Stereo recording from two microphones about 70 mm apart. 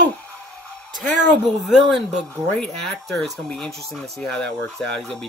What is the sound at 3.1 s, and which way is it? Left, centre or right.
Speech, centre.